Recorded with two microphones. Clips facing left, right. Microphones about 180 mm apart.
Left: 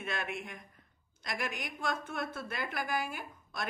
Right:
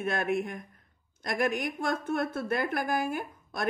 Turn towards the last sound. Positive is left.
turn(degrees=-50)  # may be behind; listen again after turning